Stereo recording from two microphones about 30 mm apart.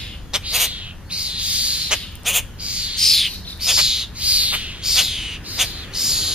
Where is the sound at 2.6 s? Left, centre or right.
Right.